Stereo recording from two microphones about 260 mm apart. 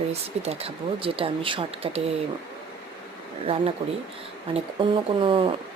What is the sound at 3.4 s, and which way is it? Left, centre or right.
Speech, right.